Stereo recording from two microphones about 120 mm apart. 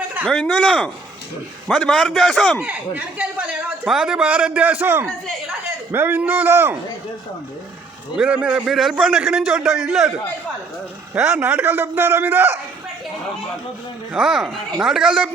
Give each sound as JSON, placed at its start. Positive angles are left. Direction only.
{"t": 0.3, "sound": "a man's voice", "side_deg": 10}
{"t": 2.6, "sound": "a man's voice", "side_deg": -15}
{"t": 8.1, "sound": "a man's voice", "side_deg": -10}
{"t": 11.1, "sound": "a man's voice", "side_deg": -10}
{"t": 14.1, "sound": "a man's voice", "side_deg": -5}